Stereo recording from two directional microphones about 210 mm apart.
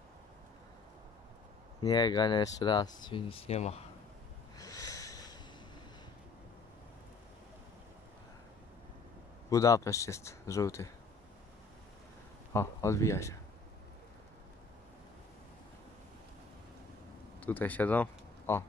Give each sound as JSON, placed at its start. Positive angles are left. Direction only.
{"t": 1.8, "sound": "speech", "side_deg": 20}
{"t": 4.6, "sound": "snort", "side_deg": 15}
{"t": 9.5, "sound": "speech", "side_deg": 15}
{"t": 12.5, "sound": "speech", "side_deg": 15}
{"t": 17.4, "sound": "speech", "side_deg": 10}